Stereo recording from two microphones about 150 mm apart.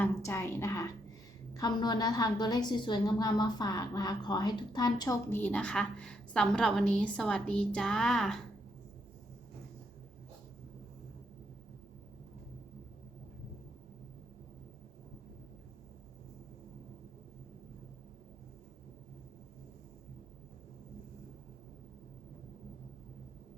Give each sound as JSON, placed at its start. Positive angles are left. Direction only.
{"t": 0.0, "sound": "a woman's voice", "side_deg": 20}
{"t": 5.3, "sound": "a woman's voice", "side_deg": 10}